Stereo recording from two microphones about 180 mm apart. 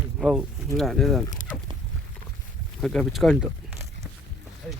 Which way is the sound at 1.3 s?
45° left (ahead or behind).